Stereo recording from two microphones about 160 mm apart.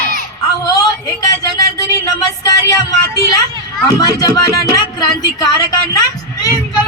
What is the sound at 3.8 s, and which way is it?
Speech, 25° left (ahead or behind).